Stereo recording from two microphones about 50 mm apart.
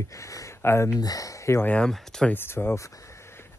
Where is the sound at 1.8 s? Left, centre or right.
Centre.